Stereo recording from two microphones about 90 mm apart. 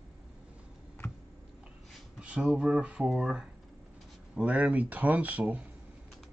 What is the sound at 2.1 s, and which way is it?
Speech, 10° right (ahead or behind).